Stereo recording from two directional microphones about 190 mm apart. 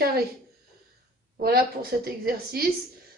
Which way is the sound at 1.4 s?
55° right (ahead or behind).